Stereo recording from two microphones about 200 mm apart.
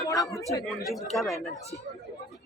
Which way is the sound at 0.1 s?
15° left (ahead or behind).